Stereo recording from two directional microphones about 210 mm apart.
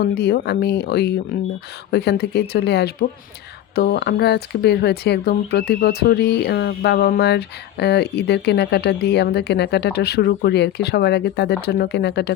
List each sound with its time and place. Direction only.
0.0 s speech: 50° left (ahead or behind)